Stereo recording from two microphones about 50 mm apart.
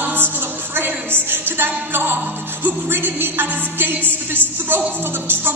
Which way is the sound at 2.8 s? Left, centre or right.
Right.